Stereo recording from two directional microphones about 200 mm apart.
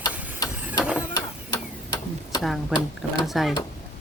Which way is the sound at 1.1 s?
20° left (ahead or behind).